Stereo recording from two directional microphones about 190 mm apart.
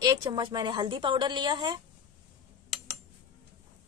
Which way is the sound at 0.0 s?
20° right (ahead or behind).